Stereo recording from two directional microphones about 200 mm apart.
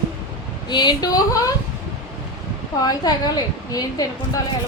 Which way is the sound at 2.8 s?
20° left (ahead or behind).